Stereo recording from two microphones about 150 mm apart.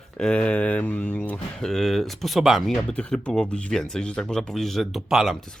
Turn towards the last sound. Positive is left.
turn(degrees=0)  # may be behind; listen again after turning